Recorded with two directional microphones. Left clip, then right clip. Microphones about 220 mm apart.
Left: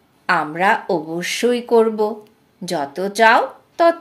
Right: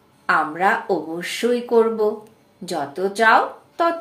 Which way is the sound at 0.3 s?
40° left (ahead or behind).